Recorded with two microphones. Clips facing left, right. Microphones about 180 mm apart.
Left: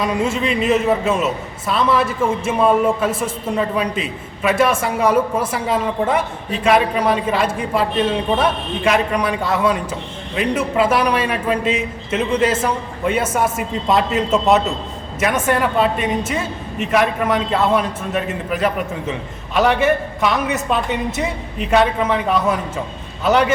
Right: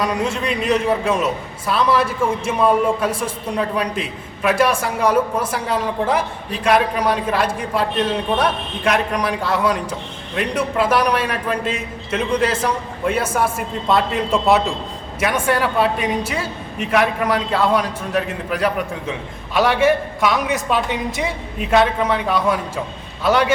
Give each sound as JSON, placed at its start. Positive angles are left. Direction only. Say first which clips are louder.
{"t": 0.0, "sound": "a woman's voice", "louder": "left 2 dB", "side_deg": 5}
{"t": 3.1, "sound": "a woman's voice", "louder": "left 1 dB", "side_deg": 25}
{"t": 3.5, "sound": "a woman's voice", "louder": "left 2 dB", "side_deg": 0}
{"t": 10.9, "sound": "a woman's voice", "louder": "left 1 dB", "side_deg": 0}